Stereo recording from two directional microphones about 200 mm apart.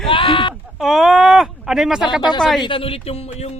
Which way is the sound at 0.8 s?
Centre (ahead or behind).